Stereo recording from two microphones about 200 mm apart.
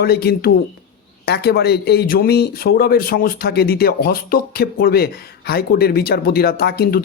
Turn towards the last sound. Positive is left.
turn(degrees=50)  # may be behind; listen again after turning